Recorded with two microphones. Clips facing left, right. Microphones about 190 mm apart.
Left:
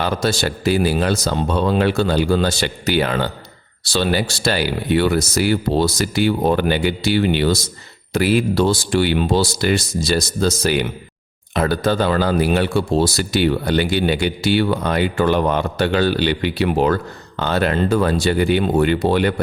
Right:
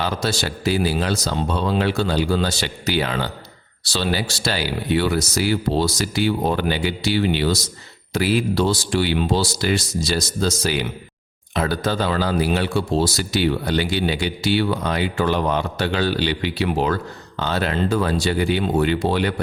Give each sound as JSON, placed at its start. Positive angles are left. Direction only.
{"t": 0.0, "sound": "speech", "side_deg": 55}